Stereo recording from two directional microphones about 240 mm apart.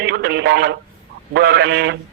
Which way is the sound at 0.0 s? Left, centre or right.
Right.